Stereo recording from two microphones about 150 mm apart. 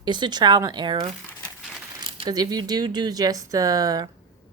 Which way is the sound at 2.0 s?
30° right (ahead or behind).